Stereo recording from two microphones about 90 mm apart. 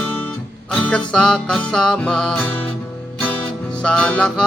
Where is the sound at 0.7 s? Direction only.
15° left (ahead or behind).